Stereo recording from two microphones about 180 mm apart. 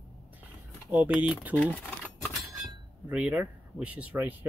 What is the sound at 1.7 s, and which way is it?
Chink, 5° left (ahead or behind).